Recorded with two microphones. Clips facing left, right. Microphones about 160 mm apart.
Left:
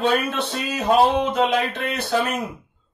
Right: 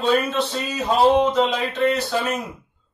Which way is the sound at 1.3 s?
55° left (ahead or behind).